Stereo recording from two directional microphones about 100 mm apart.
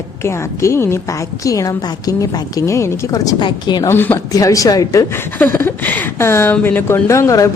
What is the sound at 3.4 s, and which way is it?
Speech, 45° left (ahead or behind).